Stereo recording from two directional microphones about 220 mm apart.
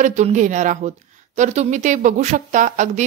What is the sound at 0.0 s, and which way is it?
Speech, 35° right (ahead or behind).